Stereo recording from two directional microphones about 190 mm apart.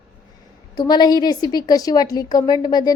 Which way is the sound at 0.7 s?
20° left (ahead or behind).